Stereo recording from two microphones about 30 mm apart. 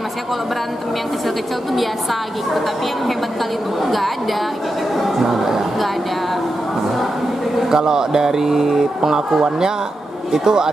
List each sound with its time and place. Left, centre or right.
1.2 s a woman's voice: centre
7.7 s speech: right